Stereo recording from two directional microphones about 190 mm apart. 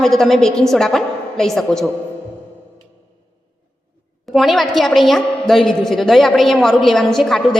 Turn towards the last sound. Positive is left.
turn(degrees=0)  # may be behind; listen again after turning